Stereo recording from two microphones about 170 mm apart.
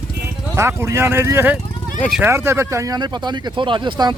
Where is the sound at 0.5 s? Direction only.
15° right (ahead or behind).